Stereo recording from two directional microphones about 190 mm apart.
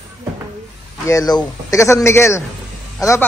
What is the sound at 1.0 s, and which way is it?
A man's voice, 20° left (ahead or behind).